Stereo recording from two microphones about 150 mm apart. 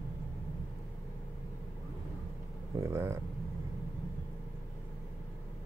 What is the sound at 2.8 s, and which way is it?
Speech, 15° right (ahead or behind).